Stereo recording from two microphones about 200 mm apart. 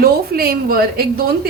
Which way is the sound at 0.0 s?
50° right (ahead or behind).